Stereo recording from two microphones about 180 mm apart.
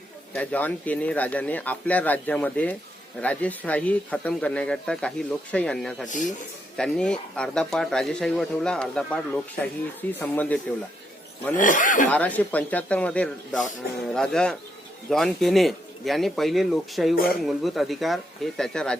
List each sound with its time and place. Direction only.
0.3 s speech: 10° left (ahead or behind)
6.1 s speech: 45° left (ahead or behind)
6.7 s speech: 5° left (ahead or behind)
11.5 s speech: 45° left (ahead or behind)
12.0 s speech: 10° left (ahead or behind)